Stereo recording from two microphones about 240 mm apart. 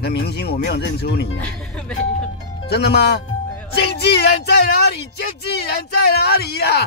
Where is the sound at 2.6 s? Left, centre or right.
Left.